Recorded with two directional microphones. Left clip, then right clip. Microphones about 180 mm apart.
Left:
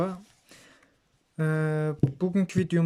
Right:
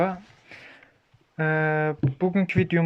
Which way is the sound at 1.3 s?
35° left (ahead or behind).